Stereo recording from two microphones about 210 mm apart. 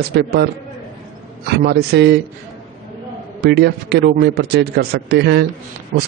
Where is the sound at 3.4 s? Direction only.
50° right (ahead or behind).